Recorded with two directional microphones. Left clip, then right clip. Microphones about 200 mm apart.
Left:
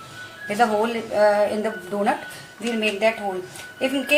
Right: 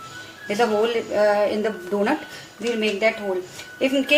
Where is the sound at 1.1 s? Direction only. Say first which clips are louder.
Left 2 dB; 35° right (ahead or behind).